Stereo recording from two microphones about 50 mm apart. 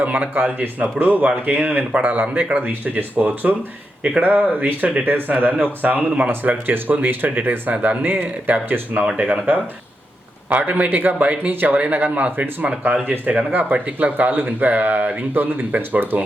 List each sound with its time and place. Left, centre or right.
0.0 s speech: right
10.6 s speech: right
11.2 s speech: right